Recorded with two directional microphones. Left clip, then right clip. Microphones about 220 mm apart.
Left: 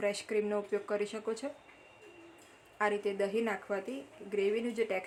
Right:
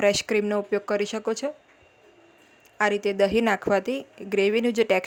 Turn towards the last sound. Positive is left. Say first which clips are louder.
# right 11 dB
turn(degrees=-40)  # may be behind; listen again after turning